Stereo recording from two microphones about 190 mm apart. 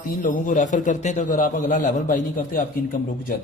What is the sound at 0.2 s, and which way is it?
A man's voice, 45° left (ahead or behind).